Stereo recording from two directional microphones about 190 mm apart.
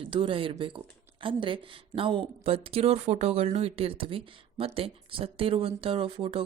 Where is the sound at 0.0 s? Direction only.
25° right (ahead or behind).